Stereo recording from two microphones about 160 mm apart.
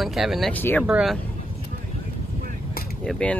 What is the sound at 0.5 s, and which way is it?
Speech, 10° left (ahead or behind).